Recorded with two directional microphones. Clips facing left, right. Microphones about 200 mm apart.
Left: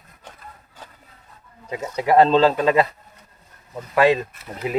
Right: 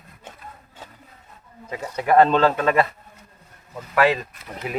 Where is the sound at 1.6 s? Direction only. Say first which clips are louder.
Left 1 dB; 15° left (ahead or behind).